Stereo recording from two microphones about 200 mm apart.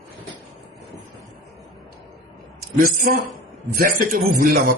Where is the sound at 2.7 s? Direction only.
45° right (ahead or behind).